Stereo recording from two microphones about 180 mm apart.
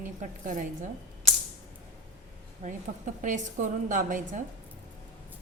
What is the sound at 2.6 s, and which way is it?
A woman's voice, 45° right (ahead or behind).